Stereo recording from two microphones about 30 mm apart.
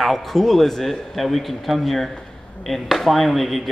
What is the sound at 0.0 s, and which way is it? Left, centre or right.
A man's voice, centre.